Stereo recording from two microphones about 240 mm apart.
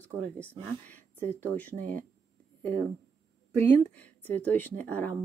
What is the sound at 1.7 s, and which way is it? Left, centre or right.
Speech, right.